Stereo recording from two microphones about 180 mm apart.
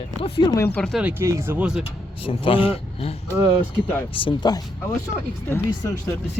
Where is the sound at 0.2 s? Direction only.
30° left (ahead or behind).